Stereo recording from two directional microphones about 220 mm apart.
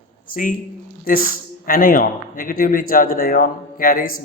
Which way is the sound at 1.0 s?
40° left (ahead or behind).